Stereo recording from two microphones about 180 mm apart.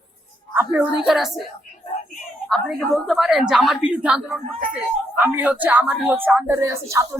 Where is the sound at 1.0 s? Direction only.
Centre (ahead or behind).